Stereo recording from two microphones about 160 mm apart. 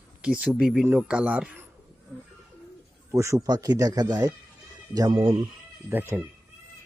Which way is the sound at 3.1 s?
15° right (ahead or behind).